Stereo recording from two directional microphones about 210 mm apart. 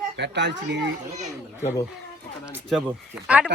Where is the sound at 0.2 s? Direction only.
55° right (ahead or behind).